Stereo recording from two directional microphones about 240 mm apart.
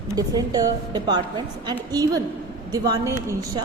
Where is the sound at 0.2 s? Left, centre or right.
Centre.